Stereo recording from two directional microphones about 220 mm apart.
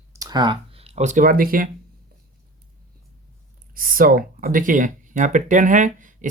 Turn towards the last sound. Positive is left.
turn(degrees=-35)  # may be behind; listen again after turning